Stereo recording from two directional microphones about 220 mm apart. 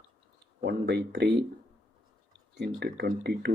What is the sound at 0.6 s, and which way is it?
Speech, 50° right (ahead or behind).